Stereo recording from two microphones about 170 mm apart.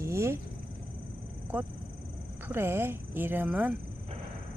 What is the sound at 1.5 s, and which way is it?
Speech, 10° right (ahead or behind).